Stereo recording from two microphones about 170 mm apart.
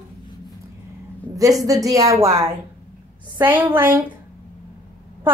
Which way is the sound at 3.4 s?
10° right (ahead or behind).